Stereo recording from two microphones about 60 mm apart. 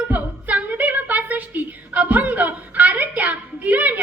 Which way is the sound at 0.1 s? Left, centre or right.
Right.